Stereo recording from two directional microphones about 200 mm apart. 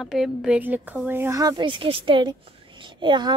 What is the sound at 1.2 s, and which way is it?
A woman's voice, 20° right (ahead or behind).